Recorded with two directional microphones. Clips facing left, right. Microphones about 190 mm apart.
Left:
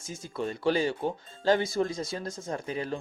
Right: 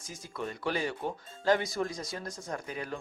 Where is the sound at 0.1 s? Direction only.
30° left (ahead or behind).